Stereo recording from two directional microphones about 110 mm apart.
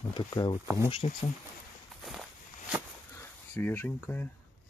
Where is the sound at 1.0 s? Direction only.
55° left (ahead or behind).